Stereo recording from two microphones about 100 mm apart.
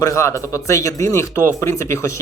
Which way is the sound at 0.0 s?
30° left (ahead or behind).